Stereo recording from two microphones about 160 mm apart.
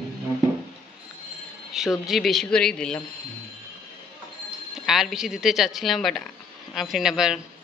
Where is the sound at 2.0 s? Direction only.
Centre (ahead or behind).